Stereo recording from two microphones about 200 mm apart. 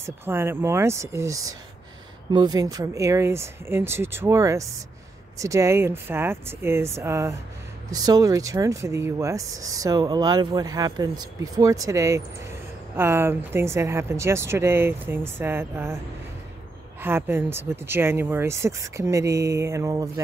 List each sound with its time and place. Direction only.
0.0 s speech: 10° right (ahead or behind)
17.0 s speech: 10° right (ahead or behind)